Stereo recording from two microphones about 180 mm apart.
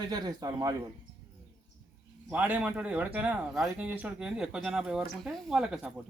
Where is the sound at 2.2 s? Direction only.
10° right (ahead or behind).